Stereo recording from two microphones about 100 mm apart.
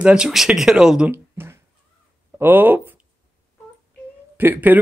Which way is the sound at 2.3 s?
20° right (ahead or behind).